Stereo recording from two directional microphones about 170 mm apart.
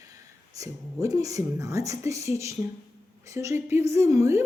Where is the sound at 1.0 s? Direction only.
20° right (ahead or behind).